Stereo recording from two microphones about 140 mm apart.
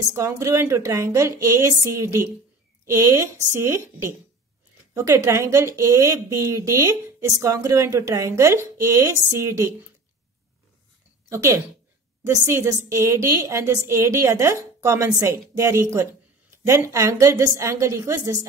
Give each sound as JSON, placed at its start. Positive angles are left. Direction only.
{"t": 0.1, "sound": "a woman's voice", "side_deg": -20}
{"t": 11.2, "sound": "a woman's voice", "side_deg": -20}